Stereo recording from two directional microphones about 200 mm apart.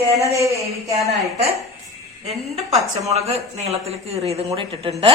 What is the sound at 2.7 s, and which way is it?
Speech, 30° right (ahead or behind).